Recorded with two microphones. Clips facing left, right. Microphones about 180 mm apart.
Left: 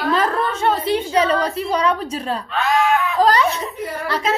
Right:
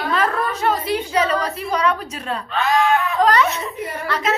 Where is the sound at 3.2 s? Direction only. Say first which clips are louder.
Left 2 dB; 30° left (ahead or behind).